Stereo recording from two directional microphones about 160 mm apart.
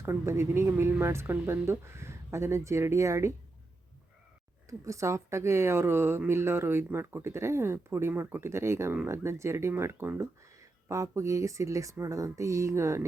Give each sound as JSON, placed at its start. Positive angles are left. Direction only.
{"t": 0.0, "sound": "a woman's voice", "side_deg": -15}
{"t": 4.9, "sound": "a woman's voice", "side_deg": -20}